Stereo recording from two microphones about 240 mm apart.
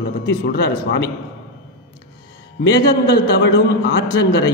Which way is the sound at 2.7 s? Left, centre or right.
Left.